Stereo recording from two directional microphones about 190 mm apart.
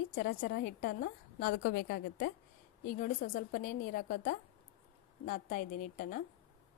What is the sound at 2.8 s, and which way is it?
A woman's voice, 45° left (ahead or behind).